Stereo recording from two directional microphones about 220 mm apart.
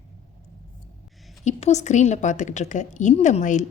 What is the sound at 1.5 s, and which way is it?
A woman's voice, 30° left (ahead or behind).